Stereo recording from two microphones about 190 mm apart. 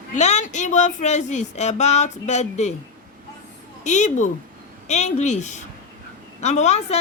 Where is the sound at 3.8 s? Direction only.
40° left (ahead or behind).